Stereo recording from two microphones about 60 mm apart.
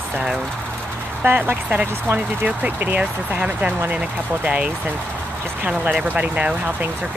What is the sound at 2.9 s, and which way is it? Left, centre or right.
Speech, centre.